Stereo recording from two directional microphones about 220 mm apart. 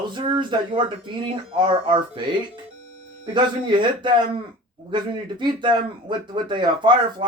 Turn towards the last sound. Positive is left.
turn(degrees=-20)  # may be behind; listen again after turning